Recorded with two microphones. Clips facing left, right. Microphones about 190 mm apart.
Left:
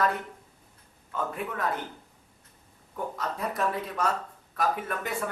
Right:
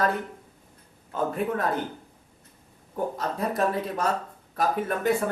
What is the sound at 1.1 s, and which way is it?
Speech, 35° right (ahead or behind).